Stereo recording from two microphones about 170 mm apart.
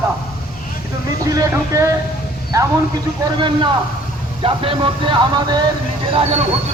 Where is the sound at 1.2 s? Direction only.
20° right (ahead or behind).